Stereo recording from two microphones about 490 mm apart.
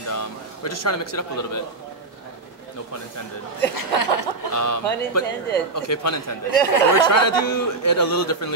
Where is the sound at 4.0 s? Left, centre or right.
Left.